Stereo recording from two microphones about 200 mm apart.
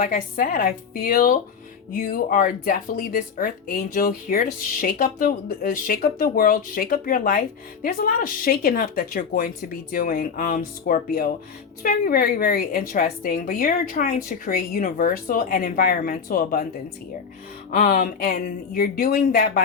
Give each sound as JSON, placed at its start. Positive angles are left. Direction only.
{"t": 0.0, "sound": "speech", "side_deg": 45}